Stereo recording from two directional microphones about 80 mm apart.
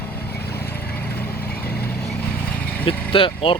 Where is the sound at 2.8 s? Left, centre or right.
Left.